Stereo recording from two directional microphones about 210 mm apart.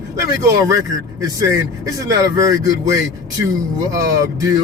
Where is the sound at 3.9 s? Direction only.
15° right (ahead or behind).